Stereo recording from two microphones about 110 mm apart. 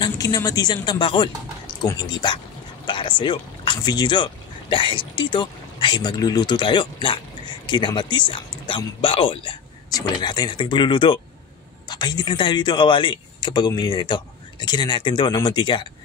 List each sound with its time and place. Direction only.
0.0 s speech: 35° left (ahead or behind); by 9.6 s 50° left (ahead or behind)
9.9 s speech: 40° left (ahead or behind)